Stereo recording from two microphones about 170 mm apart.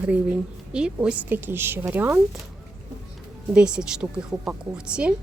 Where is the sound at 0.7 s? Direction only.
5° right (ahead or behind).